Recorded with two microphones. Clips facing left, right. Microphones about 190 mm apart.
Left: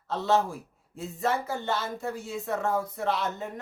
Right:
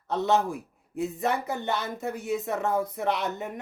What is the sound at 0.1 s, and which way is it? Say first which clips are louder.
A man's voice: right 1 dB; 20° right (ahead or behind).